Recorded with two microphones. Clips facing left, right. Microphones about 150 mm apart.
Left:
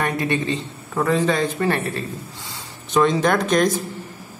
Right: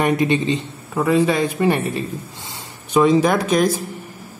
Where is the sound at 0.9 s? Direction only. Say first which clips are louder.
Right 3 dB; 10° right (ahead or behind).